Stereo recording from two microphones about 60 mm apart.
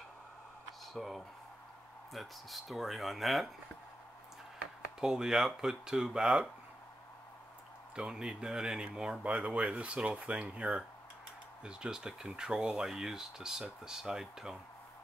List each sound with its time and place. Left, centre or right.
0.9 s speech: centre
5.0 s speech: centre
7.9 s speech: centre